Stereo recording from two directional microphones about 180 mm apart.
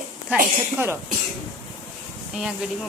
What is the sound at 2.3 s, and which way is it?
Speech, centre (ahead or behind).